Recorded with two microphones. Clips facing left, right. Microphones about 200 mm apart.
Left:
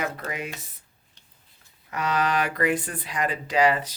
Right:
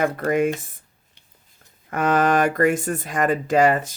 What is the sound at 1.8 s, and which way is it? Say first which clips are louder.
Speech: right 7 dB; 50° right (ahead or behind).